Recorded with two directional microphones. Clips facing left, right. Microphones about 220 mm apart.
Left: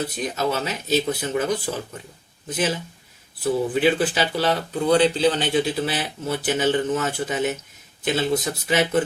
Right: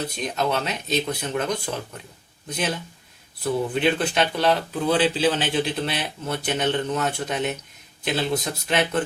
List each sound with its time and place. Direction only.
0.2 s speech: 5° left (ahead or behind)